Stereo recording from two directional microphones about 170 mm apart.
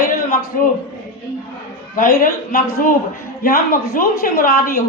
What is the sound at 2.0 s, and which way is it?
A man's voice, 55° left (ahead or behind).